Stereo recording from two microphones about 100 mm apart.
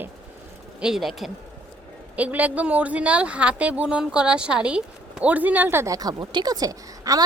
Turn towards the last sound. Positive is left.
turn(degrees=-40)  # may be behind; listen again after turning